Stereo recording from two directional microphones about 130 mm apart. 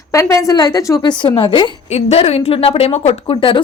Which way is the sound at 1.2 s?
40° left (ahead or behind).